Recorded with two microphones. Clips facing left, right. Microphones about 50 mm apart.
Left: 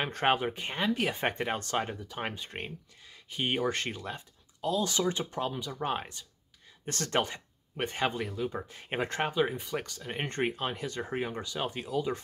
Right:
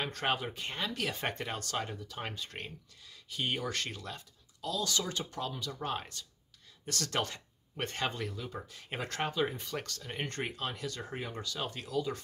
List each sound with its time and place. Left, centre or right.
0.0 s speech: left
6.9 s speech: left
7.2 s speech: centre